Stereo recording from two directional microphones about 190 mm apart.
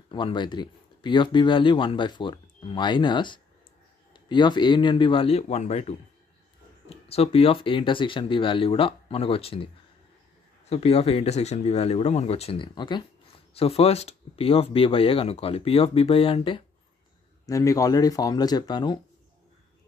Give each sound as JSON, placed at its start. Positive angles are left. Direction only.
{"t": 0.1, "sound": "speech", "side_deg": 25}
{"t": 10.7, "sound": "speech", "side_deg": 35}
{"t": 17.5, "sound": "speech", "side_deg": 20}